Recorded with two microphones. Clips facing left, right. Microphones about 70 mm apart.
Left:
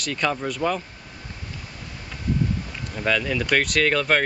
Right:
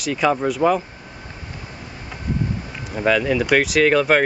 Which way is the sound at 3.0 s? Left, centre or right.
Centre.